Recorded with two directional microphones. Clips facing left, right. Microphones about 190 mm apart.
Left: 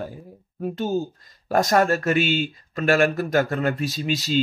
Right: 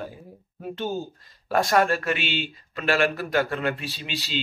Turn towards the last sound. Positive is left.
turn(degrees=40)  # may be behind; listen again after turning